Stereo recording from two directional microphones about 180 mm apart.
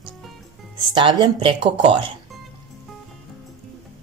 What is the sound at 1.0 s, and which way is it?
Speech, 25° right (ahead or behind).